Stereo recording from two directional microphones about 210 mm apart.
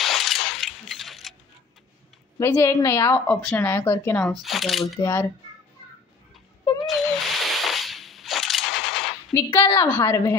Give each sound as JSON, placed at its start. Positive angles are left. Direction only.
{"t": 0.0, "sound": "vehicle", "side_deg": 0}
{"t": 2.3, "sound": "a woman's voice", "side_deg": 15}
{"t": 5.0, "sound": "a woman's voice", "side_deg": 15}
{"t": 6.9, "sound": "a sound", "side_deg": 0}
{"t": 9.3, "sound": "a woman's voice", "side_deg": 15}